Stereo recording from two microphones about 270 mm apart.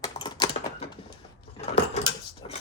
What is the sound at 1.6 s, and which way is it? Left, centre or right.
Drawer open or close, left.